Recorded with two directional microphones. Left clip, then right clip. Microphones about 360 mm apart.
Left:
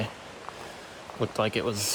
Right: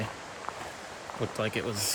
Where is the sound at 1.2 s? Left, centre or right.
Centre.